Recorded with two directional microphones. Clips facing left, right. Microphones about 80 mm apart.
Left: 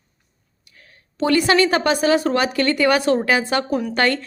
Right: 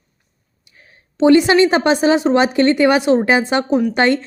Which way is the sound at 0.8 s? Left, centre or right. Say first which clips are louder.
Right 7 dB; right.